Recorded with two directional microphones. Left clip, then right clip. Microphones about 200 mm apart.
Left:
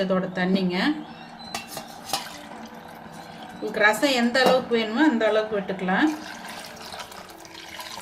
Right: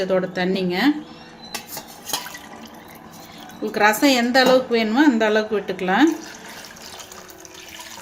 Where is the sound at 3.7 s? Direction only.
40° right (ahead or behind).